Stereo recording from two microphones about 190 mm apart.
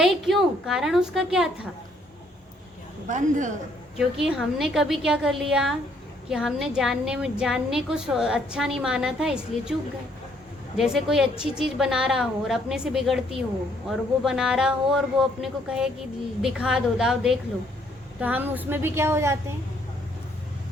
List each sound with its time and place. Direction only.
0.0 s a woman's voice: centre (ahead or behind)
3.1 s a woman's voice: 40° right (ahead or behind)
3.9 s a woman's voice: 5° right (ahead or behind)
10.8 s a woman's voice: centre (ahead or behind)